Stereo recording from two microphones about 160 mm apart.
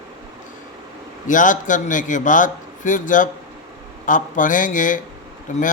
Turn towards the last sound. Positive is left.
turn(degrees=55)  # may be behind; listen again after turning